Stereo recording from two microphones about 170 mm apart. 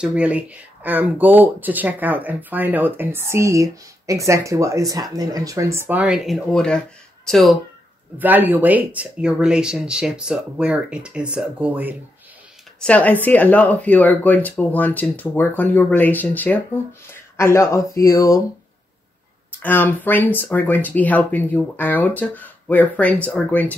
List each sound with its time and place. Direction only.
0.0 s speech: 5° right (ahead or behind)
8.2 s speech: 10° right (ahead or behind)
12.8 s speech: 10° left (ahead or behind)
19.6 s speech: 10° left (ahead or behind)